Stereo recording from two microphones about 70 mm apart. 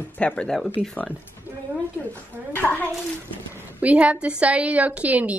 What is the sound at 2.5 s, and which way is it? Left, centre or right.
Speech, left.